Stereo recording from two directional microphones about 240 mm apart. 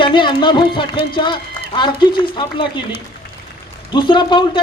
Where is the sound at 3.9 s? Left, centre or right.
Centre.